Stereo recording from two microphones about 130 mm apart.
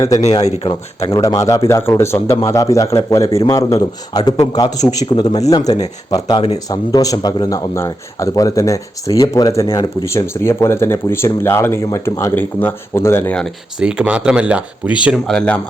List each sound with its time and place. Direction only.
0.6 s speech: 40° left (ahead or behind)
1.1 s speech: 25° left (ahead or behind); by 13.5 s 10° left (ahead or behind)
13.7 s speech: 5° right (ahead or behind)